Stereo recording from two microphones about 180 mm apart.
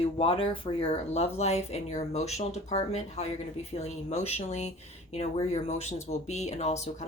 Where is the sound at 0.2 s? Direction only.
30° left (ahead or behind).